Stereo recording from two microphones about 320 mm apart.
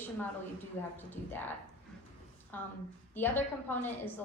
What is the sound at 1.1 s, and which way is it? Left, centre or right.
Speech, centre.